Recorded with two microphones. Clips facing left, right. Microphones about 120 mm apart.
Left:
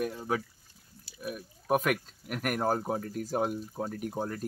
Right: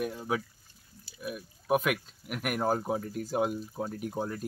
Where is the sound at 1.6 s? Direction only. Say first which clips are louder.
Even; 5° right (ahead or behind).